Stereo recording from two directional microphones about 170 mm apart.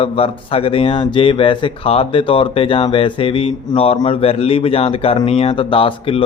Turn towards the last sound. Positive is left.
turn(degrees=30)  # may be behind; listen again after turning